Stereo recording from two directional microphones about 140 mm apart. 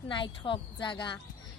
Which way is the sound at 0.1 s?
35° left (ahead or behind).